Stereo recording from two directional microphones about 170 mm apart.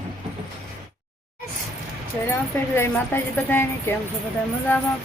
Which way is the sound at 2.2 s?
15° left (ahead or behind).